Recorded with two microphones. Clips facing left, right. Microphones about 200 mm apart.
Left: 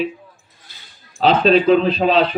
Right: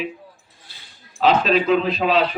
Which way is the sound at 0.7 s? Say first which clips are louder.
Even; 30° right (ahead or behind).